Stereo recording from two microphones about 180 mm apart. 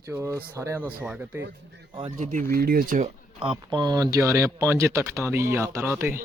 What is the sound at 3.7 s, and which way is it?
Speech, 25° right (ahead or behind).